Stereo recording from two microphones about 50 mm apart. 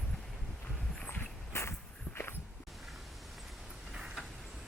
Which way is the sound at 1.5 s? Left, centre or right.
Left.